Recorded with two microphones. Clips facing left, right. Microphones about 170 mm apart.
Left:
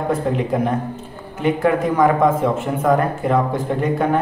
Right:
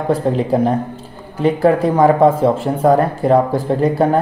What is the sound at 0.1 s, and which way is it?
A man's voice, 35° right (ahead or behind).